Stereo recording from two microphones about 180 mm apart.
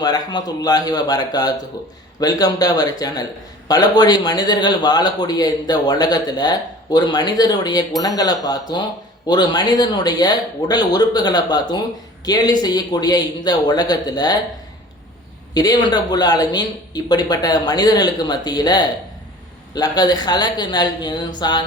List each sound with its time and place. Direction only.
0.0 s a man's voice: 20° left (ahead or behind)
15.5 s a man's voice: 20° left (ahead or behind)